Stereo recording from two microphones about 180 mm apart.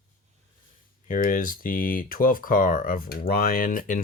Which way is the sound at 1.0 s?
50° left (ahead or behind).